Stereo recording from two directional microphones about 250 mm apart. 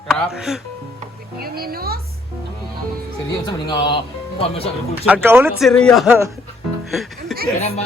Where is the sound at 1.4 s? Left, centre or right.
Right.